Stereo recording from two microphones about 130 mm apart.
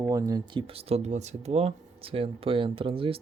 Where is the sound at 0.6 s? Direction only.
50° right (ahead or behind).